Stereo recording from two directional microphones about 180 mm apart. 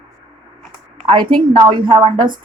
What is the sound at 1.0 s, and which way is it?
A woman's voice, 30° right (ahead or behind).